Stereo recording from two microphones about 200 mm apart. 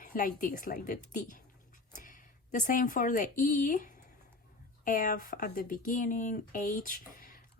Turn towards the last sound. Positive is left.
turn(degrees=45)  # may be behind; listen again after turning